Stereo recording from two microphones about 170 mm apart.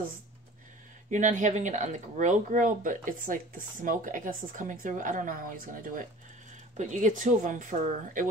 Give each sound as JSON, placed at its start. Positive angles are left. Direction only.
{"t": 1.1, "sound": "speech", "side_deg": -45}